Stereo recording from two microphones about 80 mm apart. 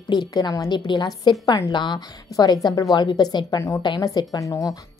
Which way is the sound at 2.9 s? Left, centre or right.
Left.